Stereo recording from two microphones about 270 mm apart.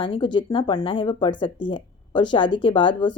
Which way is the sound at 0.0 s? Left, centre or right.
Centre.